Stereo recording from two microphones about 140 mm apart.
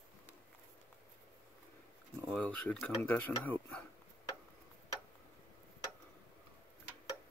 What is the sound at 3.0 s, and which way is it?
Speech, 10° left (ahead or behind).